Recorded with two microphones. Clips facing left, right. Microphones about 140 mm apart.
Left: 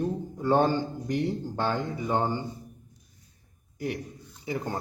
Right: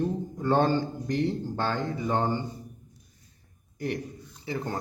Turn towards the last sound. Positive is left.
turn(degrees=15)  # may be behind; listen again after turning